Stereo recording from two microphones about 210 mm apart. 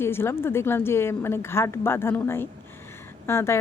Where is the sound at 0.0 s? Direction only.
10° left (ahead or behind).